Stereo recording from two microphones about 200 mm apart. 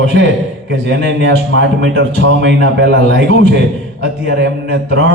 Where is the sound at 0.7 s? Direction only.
60° right (ahead or behind).